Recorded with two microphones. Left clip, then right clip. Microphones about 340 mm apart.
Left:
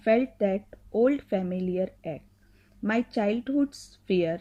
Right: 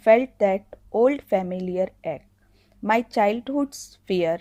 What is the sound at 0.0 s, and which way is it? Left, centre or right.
A woman's voice, right.